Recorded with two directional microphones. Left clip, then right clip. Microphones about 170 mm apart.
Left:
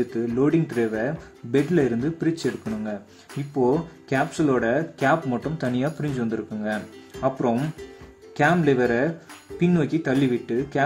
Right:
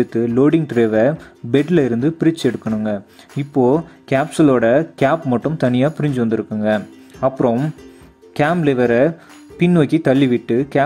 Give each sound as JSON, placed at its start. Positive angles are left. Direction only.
{"t": 0.0, "sound": "speech", "side_deg": -40}